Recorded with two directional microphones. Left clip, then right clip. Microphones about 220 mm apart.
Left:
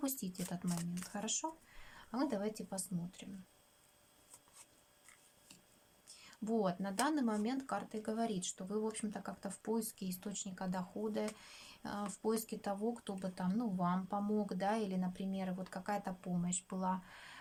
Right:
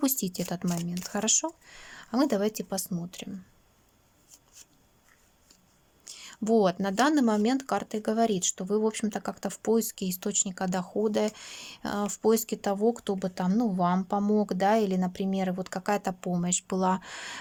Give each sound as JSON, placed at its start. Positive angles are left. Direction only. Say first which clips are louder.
{"t": 0.0, "sound": "speech", "louder": "right 13 dB", "side_deg": -45}
{"t": 6.1, "sound": "speech", "louder": "right 14 dB", "side_deg": -45}